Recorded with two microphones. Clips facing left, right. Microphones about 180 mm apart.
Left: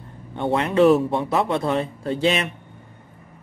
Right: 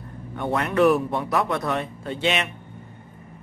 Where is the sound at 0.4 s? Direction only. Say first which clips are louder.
Left 3 dB; 25° left (ahead or behind).